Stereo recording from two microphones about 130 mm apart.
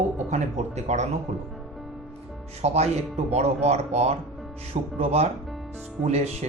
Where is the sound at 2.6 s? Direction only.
55° right (ahead or behind).